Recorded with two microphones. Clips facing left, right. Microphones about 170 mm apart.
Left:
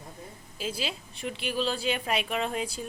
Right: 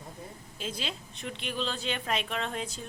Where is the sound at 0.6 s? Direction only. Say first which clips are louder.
Left 3 dB; 5° left (ahead or behind).